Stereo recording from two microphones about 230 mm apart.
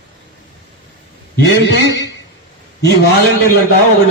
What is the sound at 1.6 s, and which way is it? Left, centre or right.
Speech, left.